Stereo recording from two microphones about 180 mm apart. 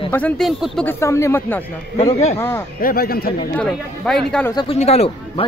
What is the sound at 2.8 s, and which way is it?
Speech, 55° left (ahead or behind).